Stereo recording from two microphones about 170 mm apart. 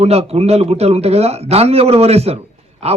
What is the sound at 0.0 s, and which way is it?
A man's voice, 40° right (ahead or behind).